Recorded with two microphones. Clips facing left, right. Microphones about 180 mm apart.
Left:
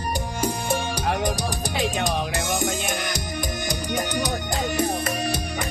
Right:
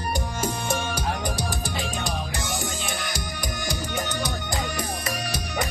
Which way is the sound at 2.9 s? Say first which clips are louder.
Left 4 dB; 45° left (ahead or behind).